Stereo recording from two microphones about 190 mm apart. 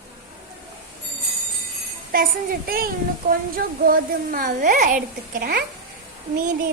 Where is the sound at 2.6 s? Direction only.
50° right (ahead or behind).